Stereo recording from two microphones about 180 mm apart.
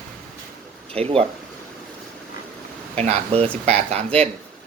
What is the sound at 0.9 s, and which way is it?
Speech, 35° right (ahead or behind).